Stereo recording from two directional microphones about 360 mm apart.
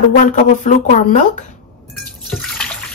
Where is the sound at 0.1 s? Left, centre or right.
Left.